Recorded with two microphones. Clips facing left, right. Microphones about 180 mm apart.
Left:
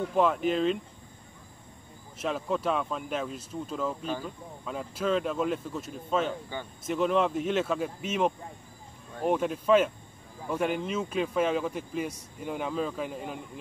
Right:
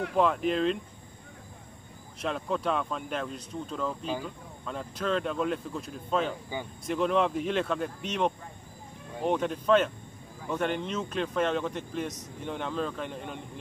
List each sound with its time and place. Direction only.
0.1 s speech: centre (ahead or behind)
2.1 s speech: 5° left (ahead or behind)